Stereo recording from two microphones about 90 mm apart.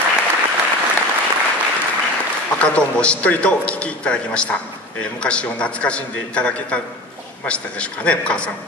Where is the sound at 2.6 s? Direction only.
15° left (ahead or behind).